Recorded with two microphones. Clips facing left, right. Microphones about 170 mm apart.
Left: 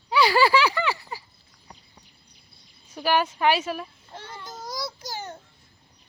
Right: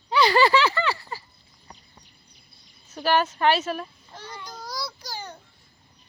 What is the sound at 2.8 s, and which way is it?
A woman's voice, 10° left (ahead or behind).